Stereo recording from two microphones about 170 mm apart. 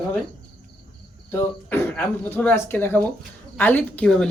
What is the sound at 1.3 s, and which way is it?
Speech, 10° left (ahead or behind).